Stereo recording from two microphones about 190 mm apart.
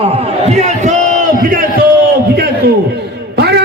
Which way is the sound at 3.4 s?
60° right (ahead or behind).